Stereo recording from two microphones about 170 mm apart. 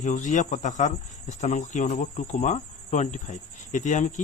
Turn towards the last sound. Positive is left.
turn(degrees=45)  # may be behind; listen again after turning